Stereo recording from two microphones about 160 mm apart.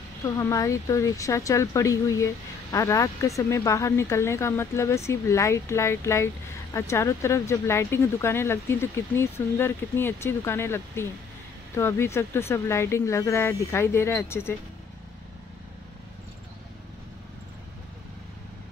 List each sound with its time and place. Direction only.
0.2 s speech: 20° left (ahead or behind)